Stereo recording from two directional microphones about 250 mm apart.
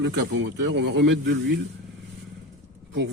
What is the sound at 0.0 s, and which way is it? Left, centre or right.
A man's voice, right.